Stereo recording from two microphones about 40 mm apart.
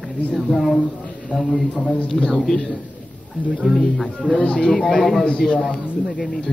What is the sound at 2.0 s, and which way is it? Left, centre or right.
A man's voice, centre.